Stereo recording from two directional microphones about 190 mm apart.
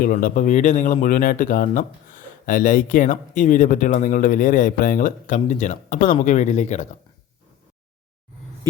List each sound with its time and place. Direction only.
0.0 s speech: 45° left (ahead or behind)